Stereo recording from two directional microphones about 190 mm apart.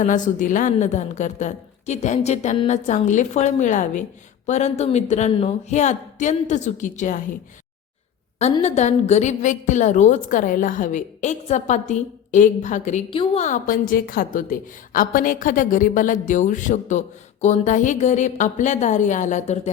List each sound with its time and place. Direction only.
0.0 s a woman's voice: 40° left (ahead or behind)
8.6 s a woman's voice: 35° left (ahead or behind)